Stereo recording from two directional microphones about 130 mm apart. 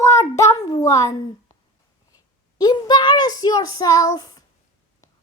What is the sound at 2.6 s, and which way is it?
A child's voice, 30° left (ahead or behind).